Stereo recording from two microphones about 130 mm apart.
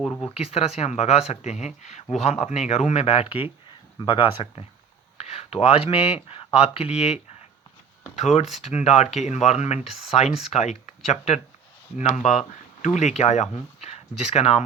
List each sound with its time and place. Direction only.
0.3 s speech: 50° left (ahead or behind)